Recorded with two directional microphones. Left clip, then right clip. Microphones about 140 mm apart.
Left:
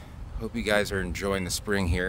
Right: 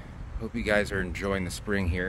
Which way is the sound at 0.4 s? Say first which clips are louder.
Left 1 dB; 25° left (ahead or behind).